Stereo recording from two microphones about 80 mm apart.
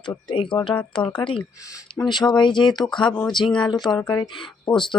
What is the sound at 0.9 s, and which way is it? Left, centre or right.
Speech, left.